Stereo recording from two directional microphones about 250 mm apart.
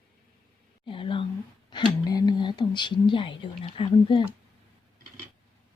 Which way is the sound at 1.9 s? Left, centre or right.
Centre.